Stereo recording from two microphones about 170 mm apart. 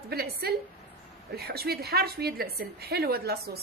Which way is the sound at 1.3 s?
65° right (ahead or behind).